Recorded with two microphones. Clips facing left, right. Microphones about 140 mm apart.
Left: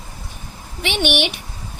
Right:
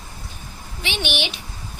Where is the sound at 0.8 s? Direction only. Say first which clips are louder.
Left 6 dB; 65° left (ahead or behind).